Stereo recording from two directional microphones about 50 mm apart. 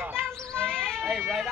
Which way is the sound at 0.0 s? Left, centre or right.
Right.